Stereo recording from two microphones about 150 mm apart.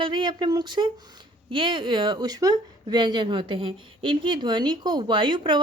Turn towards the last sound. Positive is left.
turn(degrees=-30)  # may be behind; listen again after turning